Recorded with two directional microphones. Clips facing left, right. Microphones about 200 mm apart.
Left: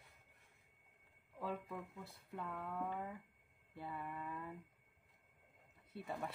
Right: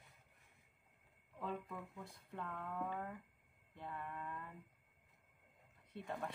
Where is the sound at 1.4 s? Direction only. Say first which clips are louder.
Left 1 dB; 5° left (ahead or behind).